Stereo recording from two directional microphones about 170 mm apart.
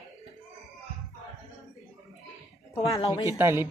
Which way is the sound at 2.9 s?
20° left (ahead or behind).